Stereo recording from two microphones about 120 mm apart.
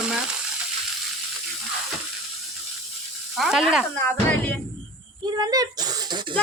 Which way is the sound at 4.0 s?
15° left (ahead or behind).